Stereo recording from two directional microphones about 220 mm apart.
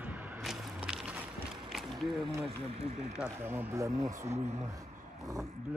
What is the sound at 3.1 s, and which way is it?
Speech, 5° right (ahead or behind).